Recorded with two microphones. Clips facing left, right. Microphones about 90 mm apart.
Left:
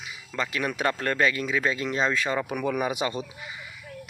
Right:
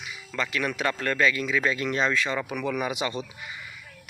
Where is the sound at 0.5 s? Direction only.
25° left (ahead or behind).